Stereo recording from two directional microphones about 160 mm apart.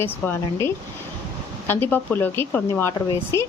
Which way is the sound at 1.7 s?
10° left (ahead or behind).